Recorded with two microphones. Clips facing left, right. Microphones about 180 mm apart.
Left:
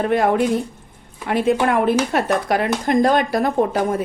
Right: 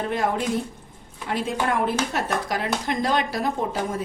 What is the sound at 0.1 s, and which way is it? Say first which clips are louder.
A woman's voice: left 7 dB; 60° left (ahead or behind).